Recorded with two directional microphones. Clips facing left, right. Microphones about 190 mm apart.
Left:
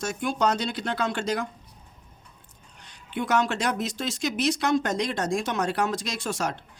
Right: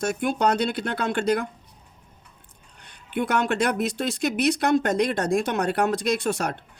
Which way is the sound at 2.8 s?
55° right (ahead or behind).